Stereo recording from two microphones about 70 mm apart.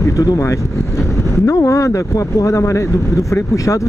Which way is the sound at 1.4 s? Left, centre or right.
Left.